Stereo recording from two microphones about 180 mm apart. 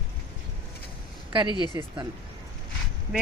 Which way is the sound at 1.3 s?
25° right (ahead or behind).